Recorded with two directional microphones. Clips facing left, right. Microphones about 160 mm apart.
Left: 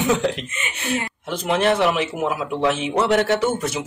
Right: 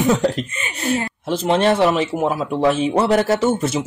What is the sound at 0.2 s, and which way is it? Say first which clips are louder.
Speech: right 3 dB; 40° right (ahead or behind).